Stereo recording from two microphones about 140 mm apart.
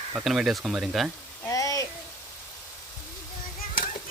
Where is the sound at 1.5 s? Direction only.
25° left (ahead or behind).